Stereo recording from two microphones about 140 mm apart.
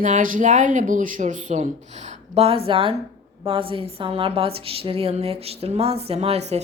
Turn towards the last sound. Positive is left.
turn(degrees=-50)  # may be behind; listen again after turning